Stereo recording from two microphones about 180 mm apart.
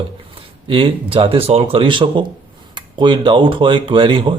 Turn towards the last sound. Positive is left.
turn(degrees=-30)  # may be behind; listen again after turning